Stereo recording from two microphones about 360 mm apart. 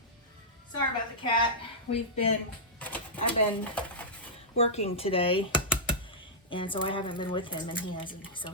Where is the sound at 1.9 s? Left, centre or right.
Left.